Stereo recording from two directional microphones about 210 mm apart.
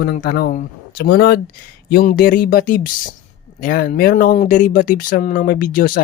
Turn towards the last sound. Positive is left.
turn(degrees=40)  # may be behind; listen again after turning